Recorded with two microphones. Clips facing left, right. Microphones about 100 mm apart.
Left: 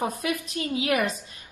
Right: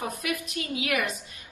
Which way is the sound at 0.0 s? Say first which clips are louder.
Left 4 dB; 35° left (ahead or behind).